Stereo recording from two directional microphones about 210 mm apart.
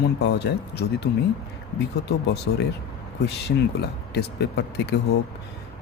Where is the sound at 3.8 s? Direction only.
50° left (ahead or behind).